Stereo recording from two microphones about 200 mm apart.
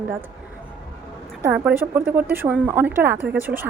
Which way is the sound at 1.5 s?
10° right (ahead or behind).